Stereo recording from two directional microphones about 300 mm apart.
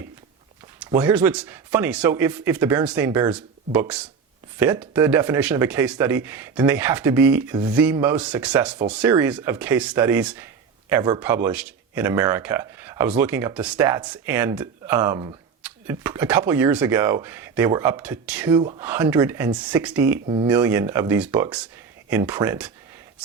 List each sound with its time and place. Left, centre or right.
0.9 s speech: centre
20.2 s speech: centre
20.5 s speech: centre